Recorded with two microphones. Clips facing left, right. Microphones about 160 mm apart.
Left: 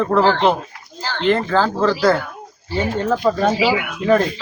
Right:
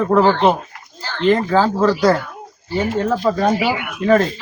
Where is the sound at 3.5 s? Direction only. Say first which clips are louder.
Left 2 dB; 90° left.